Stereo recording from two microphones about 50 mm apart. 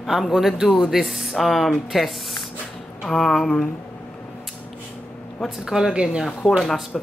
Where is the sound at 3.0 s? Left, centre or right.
Centre.